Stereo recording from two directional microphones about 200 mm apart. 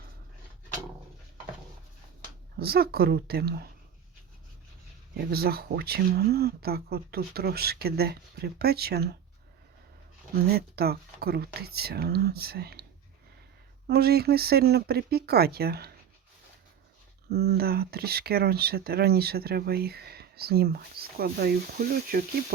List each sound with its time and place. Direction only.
2.6 s speech: 50° right (ahead or behind)
5.1 s speech: 50° right (ahead or behind)
10.3 s speech: 50° right (ahead or behind)
13.8 s speech: 50° right (ahead or behind)
17.2 s speech: 50° right (ahead or behind)